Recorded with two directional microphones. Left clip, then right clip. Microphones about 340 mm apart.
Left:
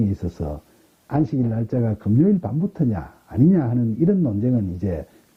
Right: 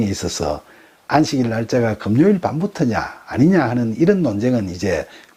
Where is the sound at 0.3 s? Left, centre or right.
Centre.